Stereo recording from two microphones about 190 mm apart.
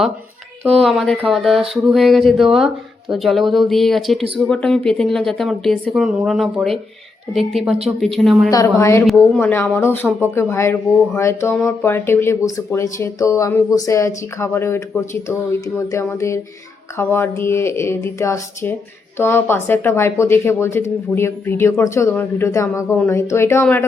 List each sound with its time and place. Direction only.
0.7 s speech: centre (ahead or behind)
8.4 s speech: 15° left (ahead or behind)
9.0 s speech: centre (ahead or behind)
9.4 s speech: 10° left (ahead or behind)